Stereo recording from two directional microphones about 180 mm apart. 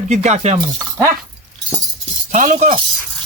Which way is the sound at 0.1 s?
40° right (ahead or behind).